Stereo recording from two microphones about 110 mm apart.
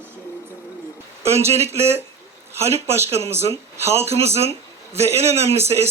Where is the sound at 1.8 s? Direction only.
70° right (ahead or behind).